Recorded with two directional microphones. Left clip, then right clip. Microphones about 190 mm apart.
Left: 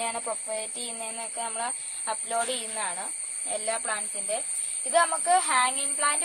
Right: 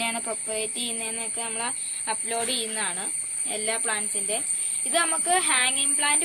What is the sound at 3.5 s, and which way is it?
Speech, 30° left (ahead or behind).